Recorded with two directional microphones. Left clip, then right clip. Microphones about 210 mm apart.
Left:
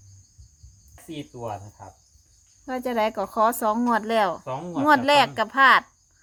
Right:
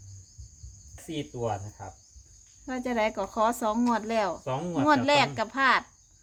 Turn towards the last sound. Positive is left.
turn(degrees=35)  # may be behind; listen again after turning